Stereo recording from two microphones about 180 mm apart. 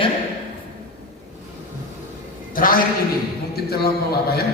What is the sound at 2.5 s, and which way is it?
A man's voice, 50° left (ahead or behind).